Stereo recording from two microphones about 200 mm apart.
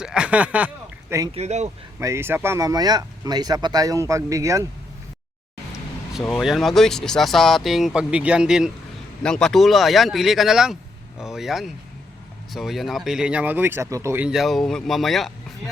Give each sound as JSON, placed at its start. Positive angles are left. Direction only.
{"t": 0.0, "sound": "speech", "side_deg": -5}
{"t": 1.3, "sound": "speech", "side_deg": -35}
{"t": 2.0, "sound": "speech", "side_deg": -15}
{"t": 5.7, "sound": "speech", "side_deg": 0}